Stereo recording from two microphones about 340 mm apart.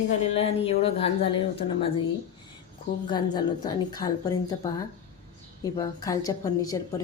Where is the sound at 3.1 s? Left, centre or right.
Centre.